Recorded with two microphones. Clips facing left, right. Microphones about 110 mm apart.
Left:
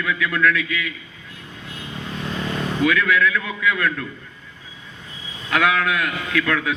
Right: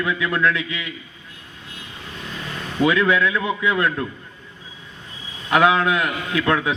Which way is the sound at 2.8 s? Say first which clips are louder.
Right 2 dB; 25° right (ahead or behind).